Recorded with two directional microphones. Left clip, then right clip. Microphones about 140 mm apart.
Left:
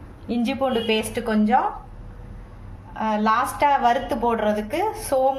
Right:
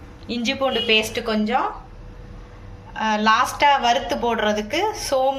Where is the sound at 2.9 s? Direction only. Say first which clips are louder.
Right 3 dB; 40° left (ahead or behind).